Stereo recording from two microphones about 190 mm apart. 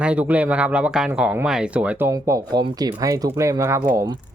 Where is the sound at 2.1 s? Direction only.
15° right (ahead or behind).